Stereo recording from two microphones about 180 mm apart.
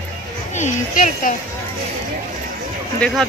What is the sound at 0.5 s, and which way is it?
Speech, 45° left (ahead or behind).